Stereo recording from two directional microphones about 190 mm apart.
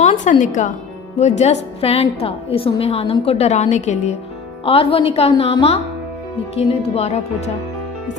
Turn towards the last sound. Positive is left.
turn(degrees=35)  # may be behind; listen again after turning